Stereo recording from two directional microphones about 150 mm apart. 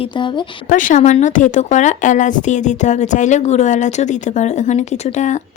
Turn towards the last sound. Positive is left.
turn(degrees=50)  # may be behind; listen again after turning